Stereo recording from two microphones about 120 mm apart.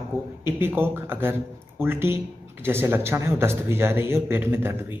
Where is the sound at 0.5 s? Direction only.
20° right (ahead or behind).